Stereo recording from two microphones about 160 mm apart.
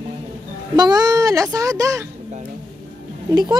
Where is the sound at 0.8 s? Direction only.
25° right (ahead or behind).